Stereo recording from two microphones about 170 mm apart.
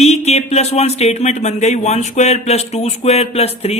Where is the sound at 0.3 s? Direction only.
40° left (ahead or behind).